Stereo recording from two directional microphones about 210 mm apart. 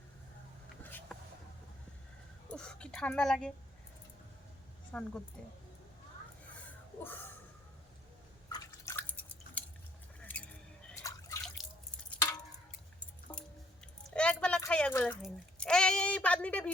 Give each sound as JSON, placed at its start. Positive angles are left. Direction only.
{"t": 0.8, "sound": "vehicle", "side_deg": 10}
{"t": 2.5, "sound": "a sound", "side_deg": 5}
{"t": 4.9, "sound": "a woman's voice", "side_deg": 5}
{"t": 7.0, "sound": "speech", "side_deg": 10}
{"t": 8.4, "sound": "drip", "side_deg": 15}
{"t": 11.6, "sound": "drip", "side_deg": 0}
{"t": 12.1, "sound": "a sound", "side_deg": 15}
{"t": 13.3, "sound": "music", "side_deg": 20}
{"t": 14.1, "sound": "a sound", "side_deg": 5}